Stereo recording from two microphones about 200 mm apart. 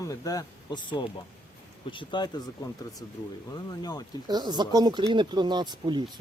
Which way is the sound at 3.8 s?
20° left (ahead or behind).